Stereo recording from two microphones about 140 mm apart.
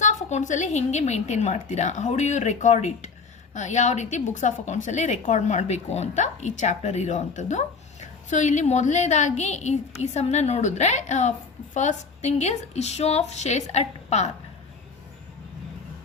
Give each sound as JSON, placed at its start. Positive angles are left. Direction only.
{"t": 0.0, "sound": "a woman's voice", "side_deg": 60}